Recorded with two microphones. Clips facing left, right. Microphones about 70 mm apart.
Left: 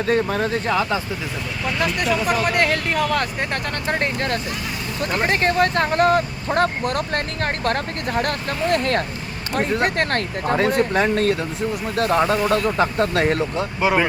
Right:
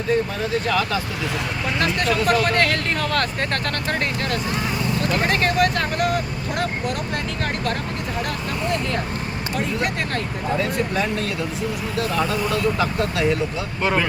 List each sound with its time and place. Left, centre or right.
0.1 s speech: left
0.7 s speech: left
1.8 s speech: centre
4.0 s speech: left
9.6 s speech: left
13.8 s speech: centre